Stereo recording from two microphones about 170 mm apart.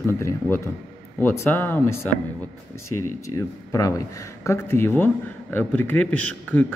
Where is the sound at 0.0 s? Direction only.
15° left (ahead or behind).